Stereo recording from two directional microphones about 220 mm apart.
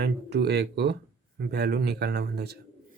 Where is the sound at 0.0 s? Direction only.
50° right (ahead or behind).